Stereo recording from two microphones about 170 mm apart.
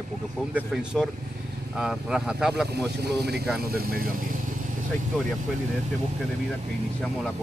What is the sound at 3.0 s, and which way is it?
Speech, 75° right (ahead or behind).